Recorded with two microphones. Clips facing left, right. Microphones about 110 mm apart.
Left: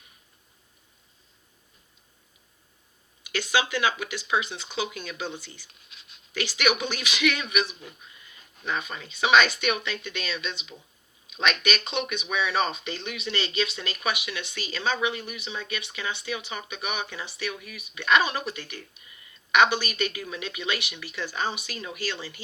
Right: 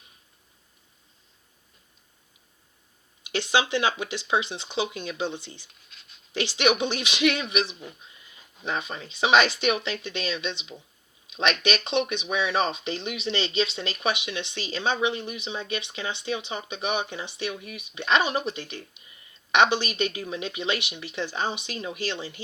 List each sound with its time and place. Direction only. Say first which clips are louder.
3.2 s speech: right 2 dB; 25° right (ahead or behind)